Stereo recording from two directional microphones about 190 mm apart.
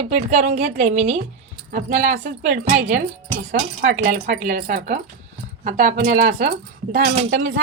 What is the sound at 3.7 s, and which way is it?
Speech, 40° right (ahead or behind).